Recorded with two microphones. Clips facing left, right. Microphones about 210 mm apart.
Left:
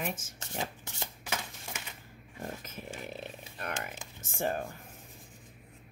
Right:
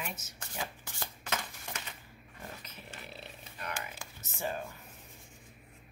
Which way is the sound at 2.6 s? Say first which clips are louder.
Left 7 dB; 45° left (ahead or behind).